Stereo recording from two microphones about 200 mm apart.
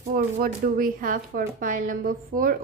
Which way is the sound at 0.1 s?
45° right (ahead or behind).